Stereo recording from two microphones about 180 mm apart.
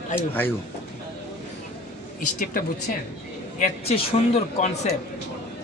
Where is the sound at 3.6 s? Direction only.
35° left (ahead or behind).